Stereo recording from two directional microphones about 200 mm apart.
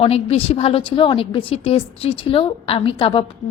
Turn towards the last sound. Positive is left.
turn(degrees=25)  # may be behind; listen again after turning